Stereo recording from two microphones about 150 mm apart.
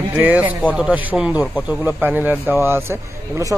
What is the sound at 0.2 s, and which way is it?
Speech, 10° right (ahead or behind).